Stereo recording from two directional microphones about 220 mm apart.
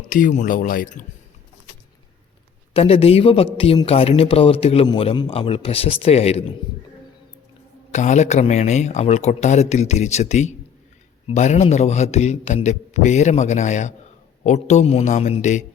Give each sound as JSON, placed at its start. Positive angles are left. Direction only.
{"t": 0.1, "sound": "a man's voice", "side_deg": 35}
{"t": 2.7, "sound": "a man's voice", "side_deg": 25}
{"t": 7.9, "sound": "a man's voice", "side_deg": 30}